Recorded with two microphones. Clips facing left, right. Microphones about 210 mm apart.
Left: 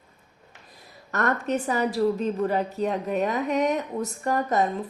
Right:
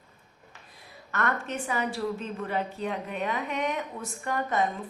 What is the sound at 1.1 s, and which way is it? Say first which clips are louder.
A woman's voice: left 5 dB; 40° left (ahead or behind).